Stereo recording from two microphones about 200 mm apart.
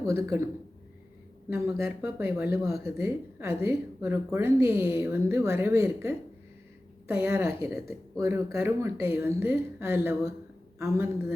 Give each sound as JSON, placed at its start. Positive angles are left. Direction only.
{"t": 0.0, "sound": "a woman's voice", "side_deg": -15}
{"t": 1.5, "sound": "a woman's voice", "side_deg": -10}
{"t": 7.2, "sound": "a woman's voice", "side_deg": -10}